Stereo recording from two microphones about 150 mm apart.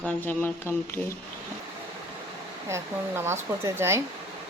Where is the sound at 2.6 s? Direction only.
20° right (ahead or behind).